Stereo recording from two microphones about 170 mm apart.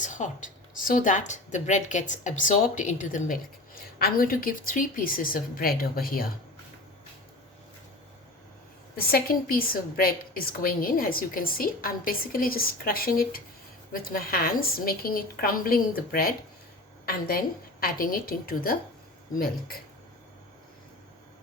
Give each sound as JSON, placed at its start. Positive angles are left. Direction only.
{"t": 0.0, "sound": "speech", "side_deg": 45}
{"t": 3.9, "sound": "a woman's voice", "side_deg": 60}
{"t": 9.0, "sound": "a woman's voice", "side_deg": 60}